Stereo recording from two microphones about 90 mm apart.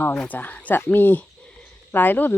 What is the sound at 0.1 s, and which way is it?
Speech, 15° left (ahead or behind).